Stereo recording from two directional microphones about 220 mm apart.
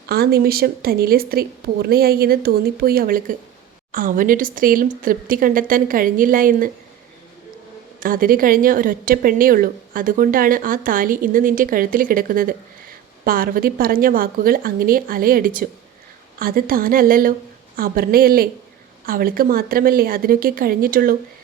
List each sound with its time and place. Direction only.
0.1 s a woman's voice: 45° right (ahead or behind)
7.9 s a woman's voice: 40° right (ahead or behind)